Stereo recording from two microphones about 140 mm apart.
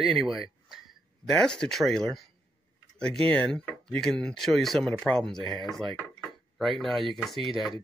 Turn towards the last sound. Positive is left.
turn(degrees=0)  # may be behind; listen again after turning